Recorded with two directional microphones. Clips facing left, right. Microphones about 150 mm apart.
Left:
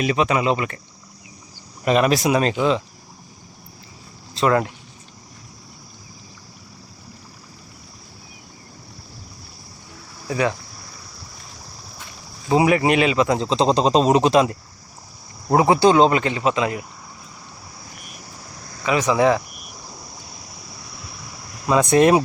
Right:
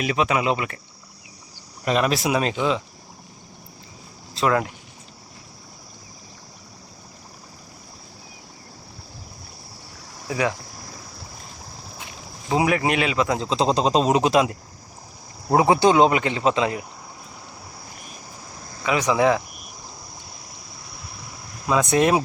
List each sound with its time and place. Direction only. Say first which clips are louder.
0.0 s speech: left 2 dB; 5° right (ahead or behind)
1.8 s speech: left 4 dB; 5° left (ahead or behind)
4.4 s speech: left 3 dB; centre (ahead or behind)
12.5 s speech: left 4 dB; 5° left (ahead or behind)
15.5 s speech: left 2 dB; 20° right (ahead or behind)
18.9 s speech: left 2 dB; 15° right (ahead or behind)
21.7 s speech: left 4 dB; centre (ahead or behind)